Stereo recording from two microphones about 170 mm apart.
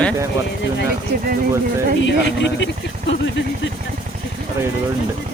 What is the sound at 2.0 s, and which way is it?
Speech, 90° left.